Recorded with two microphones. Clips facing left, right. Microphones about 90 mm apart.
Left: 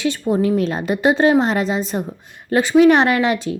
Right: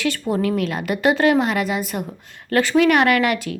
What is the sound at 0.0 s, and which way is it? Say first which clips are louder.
A woman's voice: left 3 dB; 20° left (ahead or behind).